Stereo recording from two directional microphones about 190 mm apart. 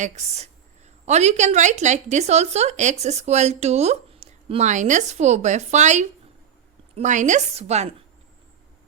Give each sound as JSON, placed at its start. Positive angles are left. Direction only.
{"t": 0.0, "sound": "a woman's voice", "side_deg": -35}